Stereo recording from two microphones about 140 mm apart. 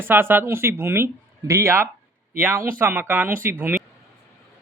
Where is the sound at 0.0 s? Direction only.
15° right (ahead or behind).